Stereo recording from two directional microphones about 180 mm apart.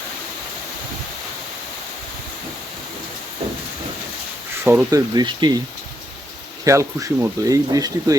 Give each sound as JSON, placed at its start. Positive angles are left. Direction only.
{"t": 4.6, "sound": "speech", "side_deg": -15}
{"t": 6.7, "sound": "speech", "side_deg": -15}